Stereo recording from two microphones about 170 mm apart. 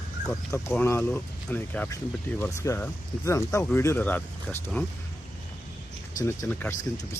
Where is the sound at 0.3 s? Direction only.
15° left (ahead or behind).